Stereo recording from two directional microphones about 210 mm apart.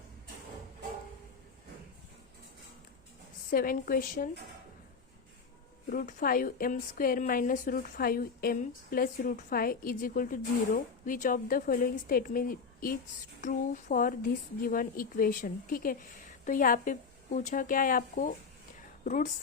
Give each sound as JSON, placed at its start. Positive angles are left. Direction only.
{"t": 3.5, "sound": "a woman's voice", "side_deg": 45}
{"t": 5.9, "sound": "a woman's voice", "side_deg": 40}